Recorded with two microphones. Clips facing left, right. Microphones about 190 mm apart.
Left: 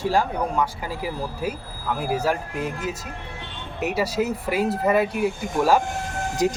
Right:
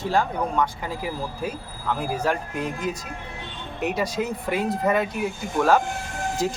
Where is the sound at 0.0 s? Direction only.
10° left (ahead or behind).